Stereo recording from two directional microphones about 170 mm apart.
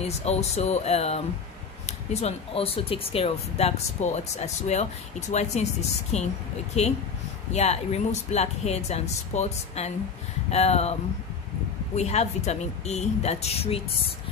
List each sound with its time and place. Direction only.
0.0 s speech: 40° left (ahead or behind)